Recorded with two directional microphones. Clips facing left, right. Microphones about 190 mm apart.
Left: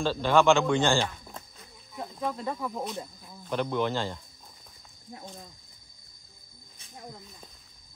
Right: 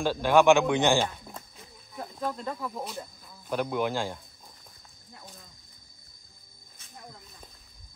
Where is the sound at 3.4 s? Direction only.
10° right (ahead or behind).